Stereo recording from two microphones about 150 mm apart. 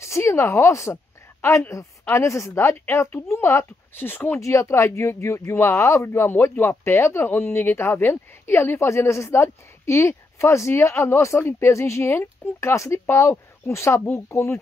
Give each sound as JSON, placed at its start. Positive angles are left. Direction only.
{"t": 0.0, "sound": "a woman's voice", "side_deg": 20}